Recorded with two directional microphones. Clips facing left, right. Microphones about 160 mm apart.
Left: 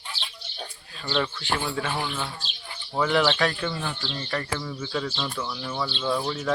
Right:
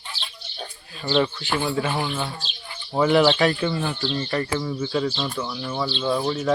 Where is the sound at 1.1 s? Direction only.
15° right (ahead or behind).